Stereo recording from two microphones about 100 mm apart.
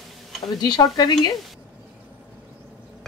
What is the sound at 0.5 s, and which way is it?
Speech, 45° left (ahead or behind).